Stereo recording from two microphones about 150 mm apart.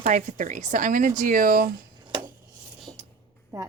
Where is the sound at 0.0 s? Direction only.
55° right (ahead or behind).